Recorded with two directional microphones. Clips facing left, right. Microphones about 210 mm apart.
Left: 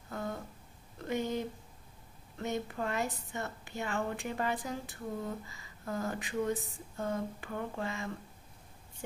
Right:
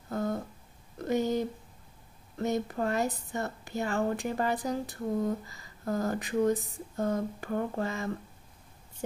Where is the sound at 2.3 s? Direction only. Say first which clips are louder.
Right 6 dB; 40° right (ahead or behind).